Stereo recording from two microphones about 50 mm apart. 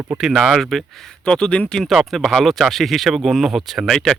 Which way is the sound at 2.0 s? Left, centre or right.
Centre.